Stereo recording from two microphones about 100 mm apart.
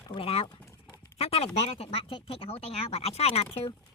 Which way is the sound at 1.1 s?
90° left.